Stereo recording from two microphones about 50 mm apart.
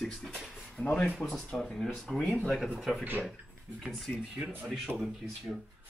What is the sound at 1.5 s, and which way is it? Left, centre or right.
Speech, centre.